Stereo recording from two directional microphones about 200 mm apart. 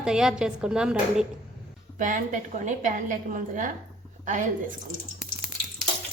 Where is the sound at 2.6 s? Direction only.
40° right (ahead or behind).